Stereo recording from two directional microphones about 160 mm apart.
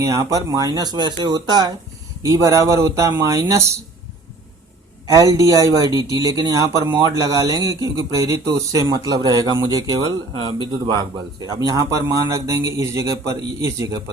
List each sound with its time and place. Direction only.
0.0 s speech: 20° right (ahead or behind)
5.1 s speech: 20° right (ahead or behind)